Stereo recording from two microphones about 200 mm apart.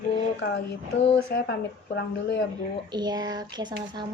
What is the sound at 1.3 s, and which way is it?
Speech, 50° left (ahead or behind).